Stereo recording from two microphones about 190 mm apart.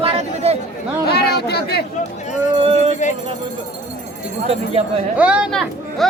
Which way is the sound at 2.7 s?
35° right (ahead or behind).